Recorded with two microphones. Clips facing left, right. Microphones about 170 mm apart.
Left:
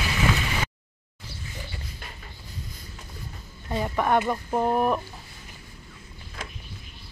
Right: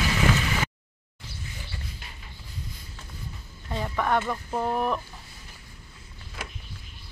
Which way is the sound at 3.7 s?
15° left (ahead or behind).